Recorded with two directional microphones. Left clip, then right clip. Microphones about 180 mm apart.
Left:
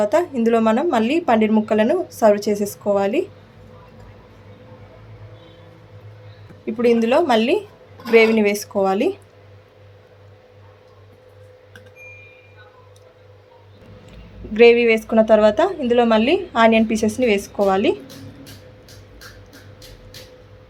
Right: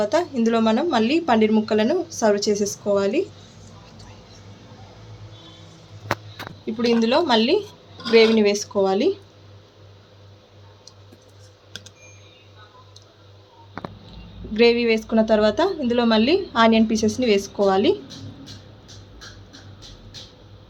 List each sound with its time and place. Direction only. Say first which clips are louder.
0.0 s a woman's voice: left 3 dB; 20° left (ahead or behind)
6.7 s a woman's voice: left 4 dB; 15° left (ahead or behind)
14.5 s a woman's voice: left 5 dB; 20° left (ahead or behind)